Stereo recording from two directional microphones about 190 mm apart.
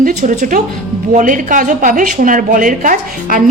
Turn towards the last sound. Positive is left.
turn(degrees=-45)  # may be behind; listen again after turning